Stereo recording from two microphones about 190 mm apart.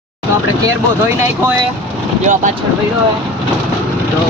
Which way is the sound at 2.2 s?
40° right (ahead or behind).